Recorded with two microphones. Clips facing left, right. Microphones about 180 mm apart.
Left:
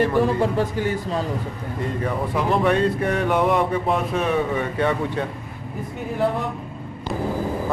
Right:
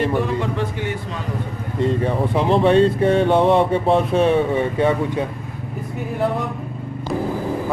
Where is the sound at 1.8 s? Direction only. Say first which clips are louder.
Right 6 dB; 25° right (ahead or behind).